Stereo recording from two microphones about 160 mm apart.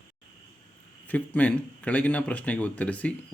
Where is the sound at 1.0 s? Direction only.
10° left (ahead or behind).